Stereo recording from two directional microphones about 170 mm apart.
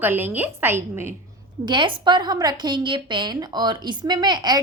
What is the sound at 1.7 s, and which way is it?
A woman's voice, 25° right (ahead or behind).